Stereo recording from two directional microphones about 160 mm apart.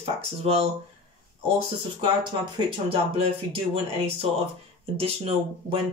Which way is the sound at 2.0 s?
30° right (ahead or behind).